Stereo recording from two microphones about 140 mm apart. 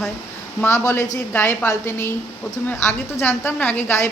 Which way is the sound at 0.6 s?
20° left (ahead or behind).